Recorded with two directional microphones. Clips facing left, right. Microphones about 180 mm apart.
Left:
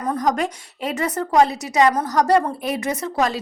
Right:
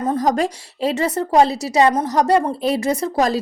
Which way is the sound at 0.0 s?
25° right (ahead or behind).